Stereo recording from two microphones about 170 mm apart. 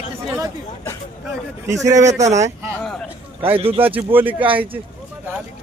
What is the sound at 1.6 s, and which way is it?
Speech, 20° right (ahead or behind).